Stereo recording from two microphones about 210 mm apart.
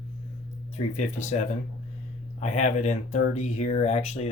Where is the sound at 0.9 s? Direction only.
35° left (ahead or behind).